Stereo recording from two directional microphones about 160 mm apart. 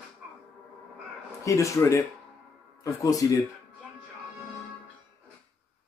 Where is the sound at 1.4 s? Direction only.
20° left (ahead or behind).